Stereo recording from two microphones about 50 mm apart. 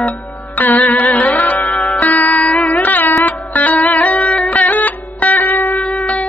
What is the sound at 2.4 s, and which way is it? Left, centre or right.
Music, left.